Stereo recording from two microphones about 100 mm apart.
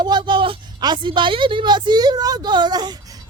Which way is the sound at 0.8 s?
50° right (ahead or behind).